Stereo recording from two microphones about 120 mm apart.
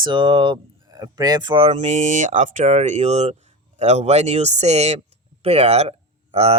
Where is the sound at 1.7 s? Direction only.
80° right.